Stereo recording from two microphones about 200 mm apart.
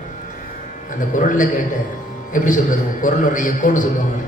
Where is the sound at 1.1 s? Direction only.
40° left (ahead or behind).